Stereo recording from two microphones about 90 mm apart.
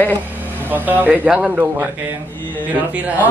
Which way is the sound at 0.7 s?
20° right (ahead or behind).